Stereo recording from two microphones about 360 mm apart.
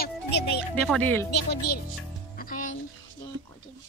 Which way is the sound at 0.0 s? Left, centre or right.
Left.